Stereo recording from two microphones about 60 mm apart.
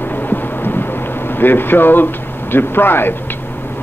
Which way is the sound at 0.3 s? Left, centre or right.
Left.